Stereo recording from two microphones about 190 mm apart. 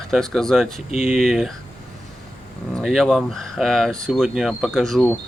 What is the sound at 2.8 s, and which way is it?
Speech, centre (ahead or behind).